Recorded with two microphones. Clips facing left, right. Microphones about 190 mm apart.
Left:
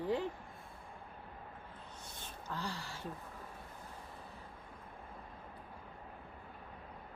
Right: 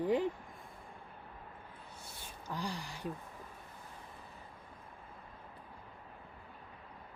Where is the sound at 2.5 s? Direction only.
15° right (ahead or behind).